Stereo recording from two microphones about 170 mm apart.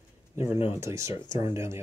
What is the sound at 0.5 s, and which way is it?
Speech, 35° left (ahead or behind).